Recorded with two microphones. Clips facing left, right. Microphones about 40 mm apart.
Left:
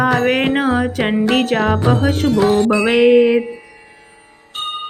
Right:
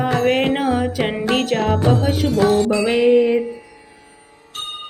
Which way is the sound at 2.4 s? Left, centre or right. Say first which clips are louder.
Left 1 dB; left.